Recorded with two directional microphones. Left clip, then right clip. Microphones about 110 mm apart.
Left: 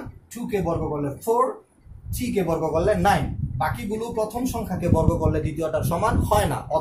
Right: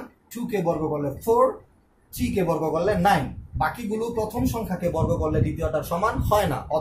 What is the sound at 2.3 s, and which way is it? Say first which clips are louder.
Speech: left 1 dB; 30° left (ahead or behind).